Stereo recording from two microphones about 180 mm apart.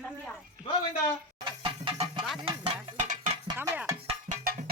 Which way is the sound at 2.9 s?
40° right (ahead or behind).